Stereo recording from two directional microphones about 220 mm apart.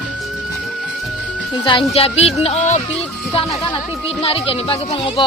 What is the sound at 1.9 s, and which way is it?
Speech, 30° left (ahead or behind).